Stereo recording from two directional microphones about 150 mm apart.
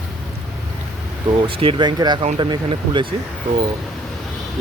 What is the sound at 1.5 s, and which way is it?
Speech, 35° right (ahead or behind).